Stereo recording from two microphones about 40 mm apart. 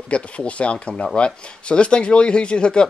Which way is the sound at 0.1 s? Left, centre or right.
Left.